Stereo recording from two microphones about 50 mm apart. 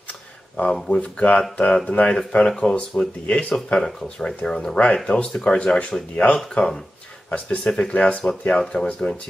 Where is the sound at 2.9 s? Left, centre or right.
Left.